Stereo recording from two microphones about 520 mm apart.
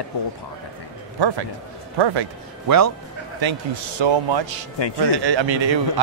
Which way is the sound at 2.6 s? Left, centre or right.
Right.